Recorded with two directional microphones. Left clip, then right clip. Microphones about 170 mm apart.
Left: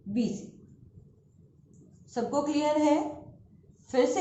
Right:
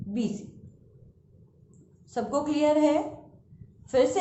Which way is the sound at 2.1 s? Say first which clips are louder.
Right 1 dB; 40° right (ahead or behind).